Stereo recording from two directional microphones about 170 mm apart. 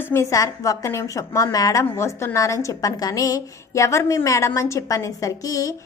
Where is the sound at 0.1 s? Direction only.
15° left (ahead or behind).